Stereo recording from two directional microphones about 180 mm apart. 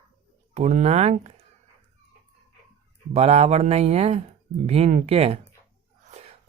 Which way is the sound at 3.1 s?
35° right (ahead or behind).